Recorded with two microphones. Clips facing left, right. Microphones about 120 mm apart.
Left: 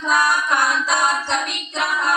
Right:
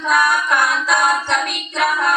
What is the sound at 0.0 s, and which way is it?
Female singing, 55° right (ahead or behind).